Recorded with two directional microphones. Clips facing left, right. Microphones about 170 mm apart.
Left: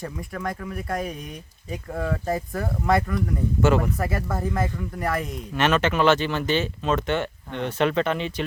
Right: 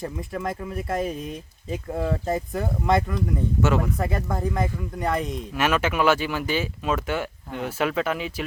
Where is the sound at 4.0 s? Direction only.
20° right (ahead or behind).